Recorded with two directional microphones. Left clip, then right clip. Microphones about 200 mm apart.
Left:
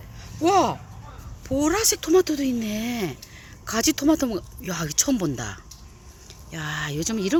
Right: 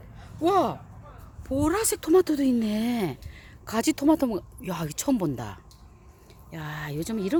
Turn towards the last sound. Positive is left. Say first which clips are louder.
# left 4 dB
turn(degrees=-10)  # may be behind; listen again after turning